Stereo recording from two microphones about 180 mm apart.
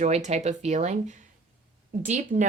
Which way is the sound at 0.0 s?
40° right (ahead or behind).